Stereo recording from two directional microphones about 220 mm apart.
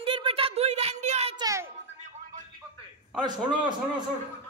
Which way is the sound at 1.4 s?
15° right (ahead or behind).